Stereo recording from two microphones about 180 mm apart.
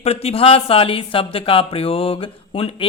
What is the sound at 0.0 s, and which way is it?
Speech, 35° left (ahead or behind).